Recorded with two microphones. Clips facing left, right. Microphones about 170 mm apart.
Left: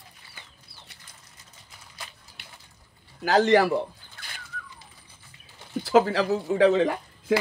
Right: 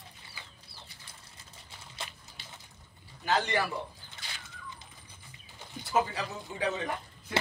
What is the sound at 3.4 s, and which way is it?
Speech, 90° left.